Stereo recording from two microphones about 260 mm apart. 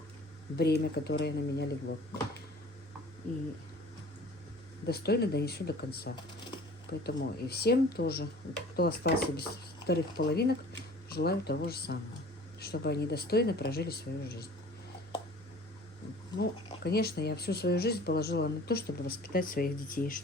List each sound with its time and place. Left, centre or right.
0.5 s speech: left
4.9 s speech: left
16.4 s speech: left